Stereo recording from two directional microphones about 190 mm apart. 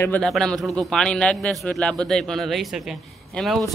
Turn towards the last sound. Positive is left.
turn(degrees=0)  # may be behind; listen again after turning